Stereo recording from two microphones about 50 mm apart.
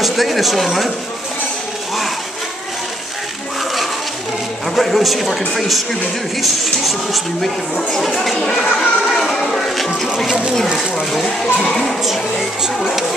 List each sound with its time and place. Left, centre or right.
0.0 s speech: centre
4.6 s speech: centre
8.7 s a sound: centre
9.2 s music: centre
9.5 s music: centre
10.0 s a sound: centre
11.4 s speech: centre
12.7 s speech: centre